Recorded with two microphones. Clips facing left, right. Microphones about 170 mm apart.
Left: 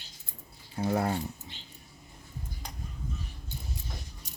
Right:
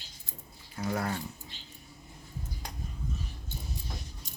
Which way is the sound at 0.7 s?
30° left (ahead or behind).